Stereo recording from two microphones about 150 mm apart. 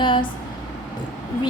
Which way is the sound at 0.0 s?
35° left (ahead or behind).